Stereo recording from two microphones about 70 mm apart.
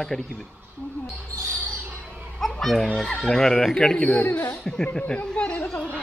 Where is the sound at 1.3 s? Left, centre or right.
Right.